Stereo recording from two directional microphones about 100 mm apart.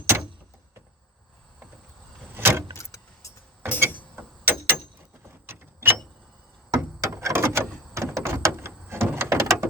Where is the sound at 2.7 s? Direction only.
30° left (ahead or behind).